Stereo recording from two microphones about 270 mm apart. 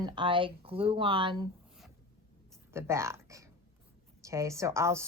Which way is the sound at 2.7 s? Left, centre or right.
Centre.